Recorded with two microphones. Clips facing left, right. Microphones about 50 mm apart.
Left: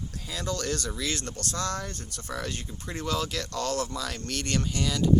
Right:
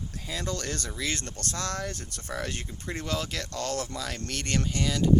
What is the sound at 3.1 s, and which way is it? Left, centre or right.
Speech, right.